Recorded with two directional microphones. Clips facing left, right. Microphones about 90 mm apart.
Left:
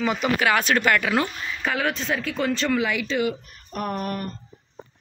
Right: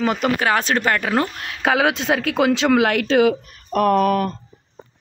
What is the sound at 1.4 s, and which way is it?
Speech, 75° right (ahead or behind).